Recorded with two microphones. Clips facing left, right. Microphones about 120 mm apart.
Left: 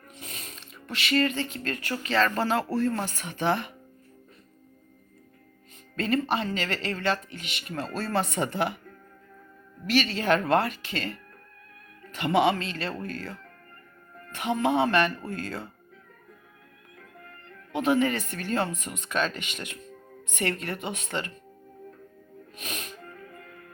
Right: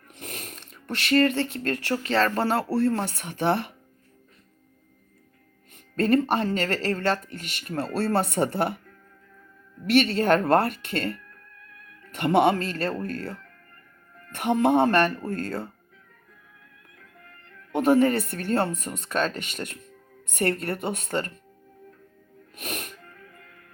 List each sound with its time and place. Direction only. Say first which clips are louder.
0.1 s a sound: right 4 dB; 60° right (ahead or behind)
2.0 s speech: right 1 dB; 45° right (ahead or behind)
6.0 s speech: right 5 dB; 50° right (ahead or behind)
7.9 s speech: right 4 dB; 60° right (ahead or behind)
8.4 s speech: right 3 dB; 45° right (ahead or behind)
9.9 s speech: right 4 dB; 60° right (ahead or behind)
14.3 s speech: right 4 dB; 55° right (ahead or behind)
17.7 s speech: right 4 dB; 50° right (ahead or behind)
22.5 s speech: right 4 dB; 60° right (ahead or behind)
23.0 s music: left 5 dB; 35° left (ahead or behind)